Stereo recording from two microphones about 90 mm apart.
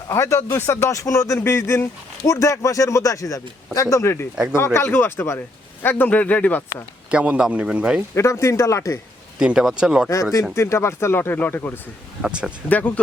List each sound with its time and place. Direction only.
0.1 s speech: 30° left (ahead or behind)
7.1 s speech: 15° right (ahead or behind)
8.1 s speech: 35° left (ahead or behind)
9.4 s speech: 10° right (ahead or behind)
10.5 s speech: 35° left (ahead or behind)
12.2 s speech: 10° right (ahead or behind)
12.6 s speech: 20° left (ahead or behind)